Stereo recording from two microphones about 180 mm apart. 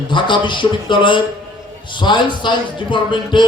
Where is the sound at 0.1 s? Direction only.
25° left (ahead or behind).